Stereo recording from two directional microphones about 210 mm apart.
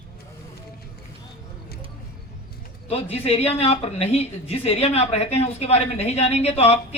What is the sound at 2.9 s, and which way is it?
Speech, 30° left (ahead or behind).